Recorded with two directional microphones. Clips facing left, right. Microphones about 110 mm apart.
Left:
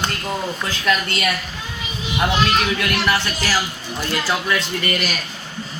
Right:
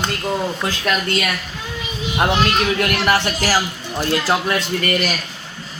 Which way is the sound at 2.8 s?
40° right (ahead or behind).